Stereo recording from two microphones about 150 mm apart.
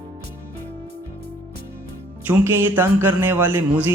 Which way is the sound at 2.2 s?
15° right (ahead or behind).